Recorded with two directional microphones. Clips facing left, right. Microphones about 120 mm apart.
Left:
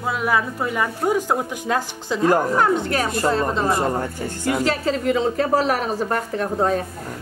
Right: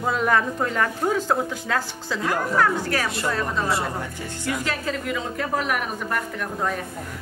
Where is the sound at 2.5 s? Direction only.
20° left (ahead or behind).